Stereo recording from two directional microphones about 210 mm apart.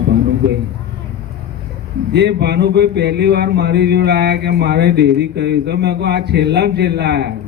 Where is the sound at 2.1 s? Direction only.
55° right (ahead or behind).